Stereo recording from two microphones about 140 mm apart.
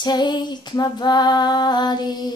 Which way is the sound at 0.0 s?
30° left (ahead or behind).